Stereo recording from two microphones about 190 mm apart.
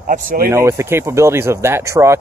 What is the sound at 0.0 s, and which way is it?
Speech, 50° right (ahead or behind).